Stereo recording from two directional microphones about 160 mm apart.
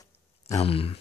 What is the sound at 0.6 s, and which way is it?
Speech, 35° left (ahead or behind).